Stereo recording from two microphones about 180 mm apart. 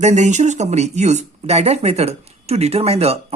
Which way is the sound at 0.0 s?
40° right (ahead or behind).